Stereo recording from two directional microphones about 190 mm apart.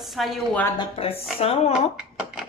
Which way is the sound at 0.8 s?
30° left (ahead or behind).